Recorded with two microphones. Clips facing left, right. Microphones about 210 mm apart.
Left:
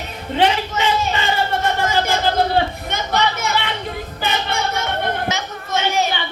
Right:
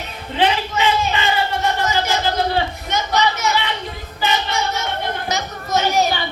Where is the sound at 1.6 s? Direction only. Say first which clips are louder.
Left 1 dB; 55° left (ahead or behind).